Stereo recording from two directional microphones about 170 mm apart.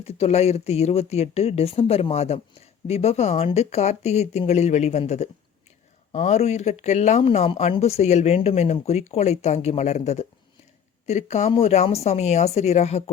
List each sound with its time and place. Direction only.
0.0 s speech: 35° left (ahead or behind)